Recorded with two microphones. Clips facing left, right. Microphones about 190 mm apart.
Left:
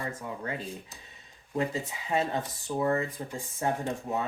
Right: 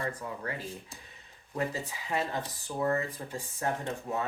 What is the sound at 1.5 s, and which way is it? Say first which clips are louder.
Speech: left 3 dB; 25° left (ahead or behind).